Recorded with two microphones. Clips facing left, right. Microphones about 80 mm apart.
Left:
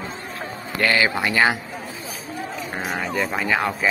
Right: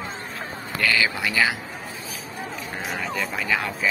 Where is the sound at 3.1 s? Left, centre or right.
Left.